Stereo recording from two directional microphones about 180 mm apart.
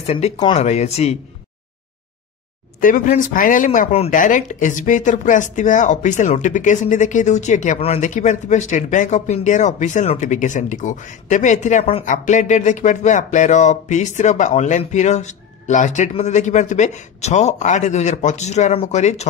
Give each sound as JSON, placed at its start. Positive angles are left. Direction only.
{"t": 0.0, "sound": "speech", "side_deg": 35}
{"t": 2.8, "sound": "speech", "side_deg": 45}